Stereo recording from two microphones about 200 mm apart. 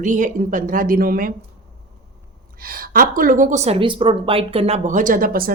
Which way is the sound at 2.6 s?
45° right (ahead or behind).